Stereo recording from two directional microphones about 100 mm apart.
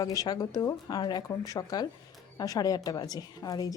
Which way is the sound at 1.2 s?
35° left (ahead or behind).